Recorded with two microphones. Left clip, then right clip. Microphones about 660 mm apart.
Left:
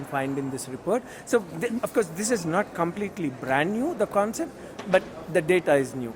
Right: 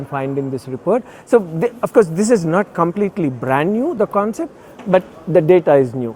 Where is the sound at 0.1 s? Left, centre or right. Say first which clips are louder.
Right 7 dB; right.